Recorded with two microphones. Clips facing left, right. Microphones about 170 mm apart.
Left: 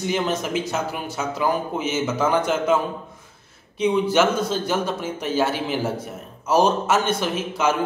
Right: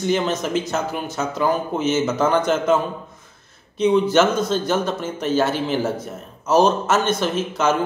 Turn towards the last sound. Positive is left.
turn(degrees=10)  # may be behind; listen again after turning